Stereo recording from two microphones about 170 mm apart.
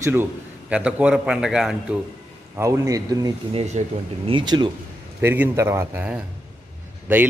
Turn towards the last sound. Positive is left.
turn(degrees=-10)  # may be behind; listen again after turning